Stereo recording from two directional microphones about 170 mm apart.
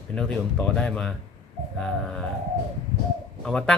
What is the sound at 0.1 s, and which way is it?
Speech, 5° left (ahead or behind).